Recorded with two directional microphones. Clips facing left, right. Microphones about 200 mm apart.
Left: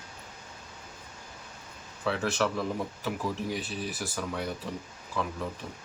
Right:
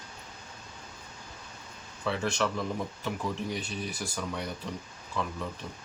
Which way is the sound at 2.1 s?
5° left (ahead or behind).